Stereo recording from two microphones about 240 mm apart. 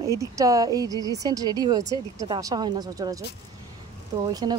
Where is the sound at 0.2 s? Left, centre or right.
Centre.